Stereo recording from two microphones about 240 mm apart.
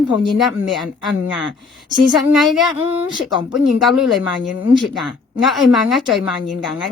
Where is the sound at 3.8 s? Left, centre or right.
Centre.